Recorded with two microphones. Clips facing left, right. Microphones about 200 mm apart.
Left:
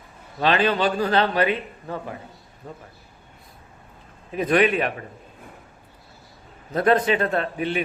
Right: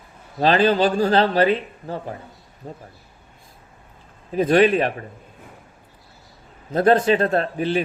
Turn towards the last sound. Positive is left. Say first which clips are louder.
# right 3 dB
turn(degrees=-35)  # may be behind; listen again after turning